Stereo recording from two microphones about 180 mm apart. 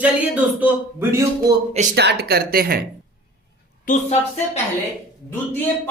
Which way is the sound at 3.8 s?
40° left (ahead or behind).